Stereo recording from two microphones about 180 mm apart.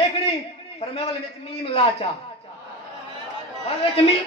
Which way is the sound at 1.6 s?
35° left (ahead or behind).